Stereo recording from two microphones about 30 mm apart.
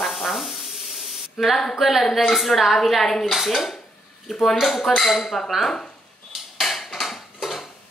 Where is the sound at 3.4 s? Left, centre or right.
Centre.